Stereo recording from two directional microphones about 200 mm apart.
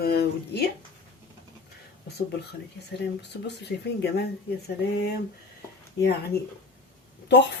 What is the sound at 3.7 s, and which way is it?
Speech, 55° left (ahead or behind).